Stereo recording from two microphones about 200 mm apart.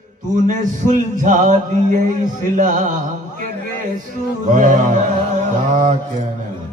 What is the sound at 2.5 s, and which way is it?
Speech, 40° right (ahead or behind).